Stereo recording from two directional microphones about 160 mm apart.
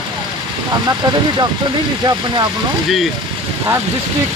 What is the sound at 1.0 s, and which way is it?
Speech, 25° right (ahead or behind).